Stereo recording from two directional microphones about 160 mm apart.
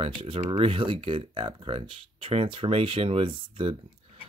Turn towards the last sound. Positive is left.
turn(degrees=-35)  # may be behind; listen again after turning